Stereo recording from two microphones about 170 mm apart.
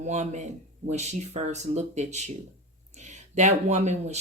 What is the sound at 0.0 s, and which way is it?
Speech, 40° right (ahead or behind).